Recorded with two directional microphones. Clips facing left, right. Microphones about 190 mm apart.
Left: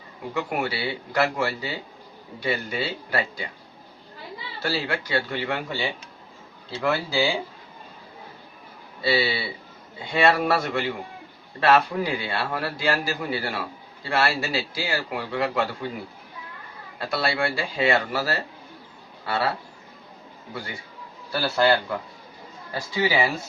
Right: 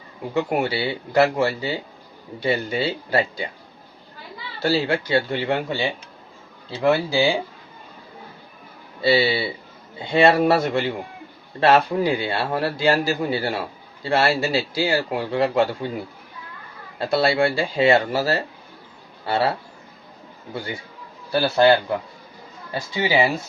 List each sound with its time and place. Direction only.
0.3 s a man's voice: 25° right (ahead or behind)
4.6 s a man's voice: 25° right (ahead or behind)
9.0 s a man's voice: 25° right (ahead or behind)
17.0 s a man's voice: 25° right (ahead or behind)
21.3 s a man's voice: 20° right (ahead or behind)